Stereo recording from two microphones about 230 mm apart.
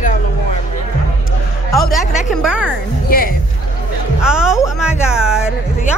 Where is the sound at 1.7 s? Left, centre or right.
Centre.